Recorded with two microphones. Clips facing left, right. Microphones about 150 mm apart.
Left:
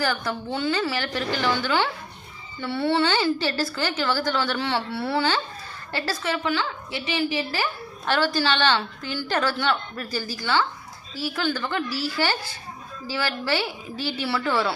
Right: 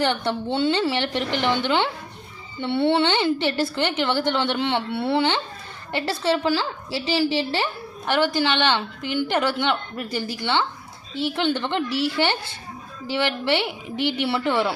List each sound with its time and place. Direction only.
0.0 s a woman's voice: 30° right (ahead or behind)
8.0 s a woman's voice: 15° right (ahead or behind)